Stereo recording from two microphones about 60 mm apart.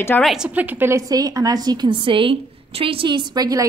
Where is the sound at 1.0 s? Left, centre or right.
Right.